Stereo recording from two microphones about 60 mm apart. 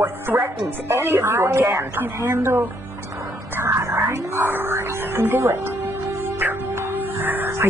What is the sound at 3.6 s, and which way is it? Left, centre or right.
Whispering, right.